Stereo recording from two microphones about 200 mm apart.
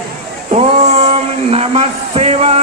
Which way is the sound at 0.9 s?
30° right (ahead or behind).